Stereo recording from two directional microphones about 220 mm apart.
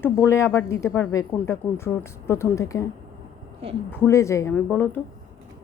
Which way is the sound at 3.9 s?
10° left (ahead or behind).